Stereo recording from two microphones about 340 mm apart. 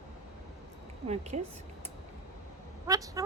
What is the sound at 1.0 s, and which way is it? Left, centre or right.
Speech, centre.